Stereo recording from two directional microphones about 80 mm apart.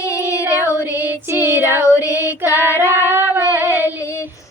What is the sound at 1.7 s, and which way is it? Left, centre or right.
Music, right.